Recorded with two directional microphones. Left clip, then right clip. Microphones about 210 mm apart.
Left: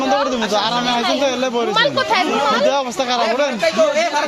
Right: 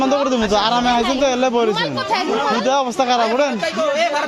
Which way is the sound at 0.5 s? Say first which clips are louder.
Right 3 dB; 45° right (ahead or behind).